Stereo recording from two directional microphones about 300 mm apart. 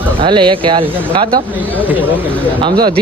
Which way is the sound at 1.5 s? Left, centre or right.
Centre.